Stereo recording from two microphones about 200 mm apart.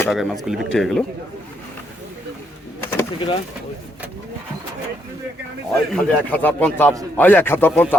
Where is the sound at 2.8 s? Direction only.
10° left (ahead or behind).